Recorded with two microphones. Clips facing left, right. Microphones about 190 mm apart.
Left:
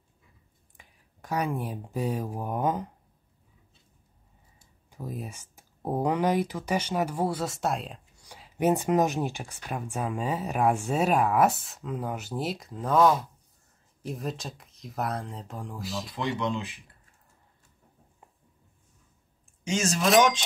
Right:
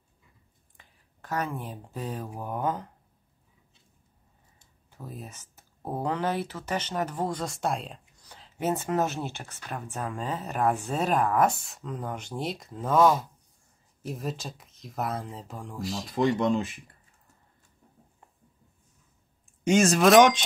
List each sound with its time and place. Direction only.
0.7 s speech: 10° left (ahead or behind)
4.6 s speech: 15° left (ahead or behind)
8.3 s speech: 10° left (ahead or behind)
16.3 s speech: 45° right (ahead or behind)
19.6 s speech: 55° right (ahead or behind)